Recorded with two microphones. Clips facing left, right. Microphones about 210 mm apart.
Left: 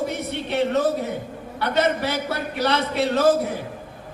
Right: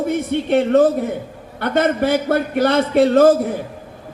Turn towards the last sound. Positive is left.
turn(degrees=-50)  # may be behind; listen again after turning